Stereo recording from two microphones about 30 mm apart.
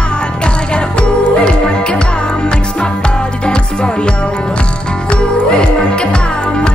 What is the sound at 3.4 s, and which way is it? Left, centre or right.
Music, left.